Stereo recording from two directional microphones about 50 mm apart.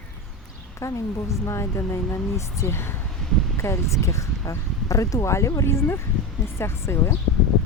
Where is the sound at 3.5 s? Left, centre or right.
Left.